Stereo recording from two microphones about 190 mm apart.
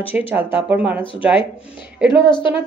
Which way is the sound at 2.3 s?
25° left (ahead or behind).